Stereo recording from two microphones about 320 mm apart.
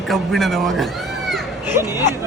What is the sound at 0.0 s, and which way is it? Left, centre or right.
Speech, centre.